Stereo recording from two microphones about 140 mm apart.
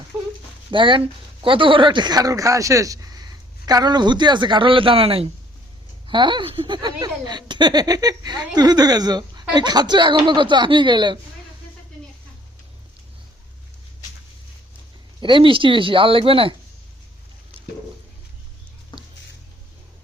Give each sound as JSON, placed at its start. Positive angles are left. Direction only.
{"t": 0.7, "sound": "speech", "side_deg": -35}
{"t": 15.2, "sound": "speech", "side_deg": -35}
{"t": 18.9, "sound": "a sound", "side_deg": 30}